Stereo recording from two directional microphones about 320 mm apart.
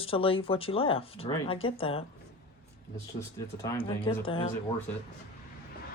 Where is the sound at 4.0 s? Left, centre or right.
Centre.